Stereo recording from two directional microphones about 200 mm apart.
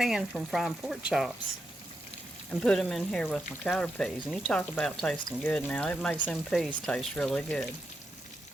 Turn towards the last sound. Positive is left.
turn(degrees=5)  # may be behind; listen again after turning